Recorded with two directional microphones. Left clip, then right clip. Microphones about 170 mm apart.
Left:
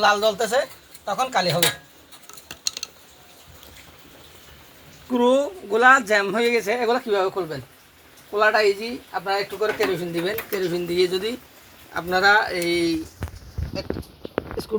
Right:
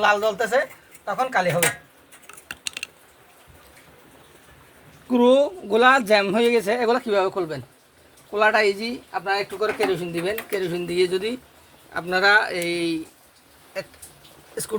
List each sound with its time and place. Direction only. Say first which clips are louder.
0.0 s speech: left 1 dB; 10° right (ahead or behind)
5.1 s speech: right 2 dB; 45° right (ahead or behind); by 13.0 s 10° right (ahead or behind)